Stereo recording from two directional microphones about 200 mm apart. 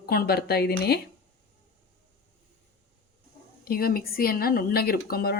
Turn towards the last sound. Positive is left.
turn(degrees=50)  # may be behind; listen again after turning